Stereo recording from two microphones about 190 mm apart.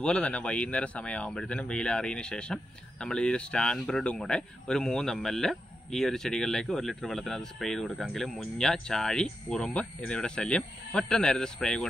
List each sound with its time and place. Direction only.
0.0 s speech: 5° left (ahead or behind)